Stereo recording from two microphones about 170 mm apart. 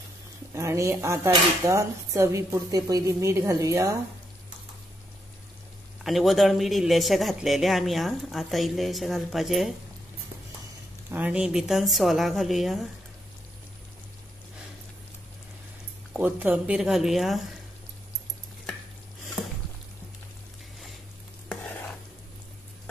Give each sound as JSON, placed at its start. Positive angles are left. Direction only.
{"t": 0.5, "sound": "a woman's voice", "side_deg": -15}
{"t": 6.0, "sound": "speech", "side_deg": 0}
{"t": 11.1, "sound": "speech", "side_deg": -10}
{"t": 16.1, "sound": "speech", "side_deg": -10}